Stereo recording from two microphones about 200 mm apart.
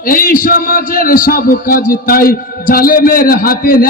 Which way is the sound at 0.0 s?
45° left (ahead or behind).